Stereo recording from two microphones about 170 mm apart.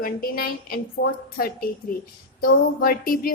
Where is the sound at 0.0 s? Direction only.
60° left (ahead or behind).